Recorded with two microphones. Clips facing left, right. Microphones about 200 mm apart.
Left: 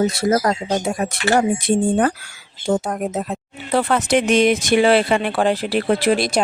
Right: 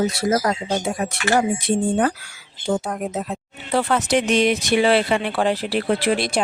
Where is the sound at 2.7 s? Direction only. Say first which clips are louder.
Left 3 dB; 40° left (ahead or behind).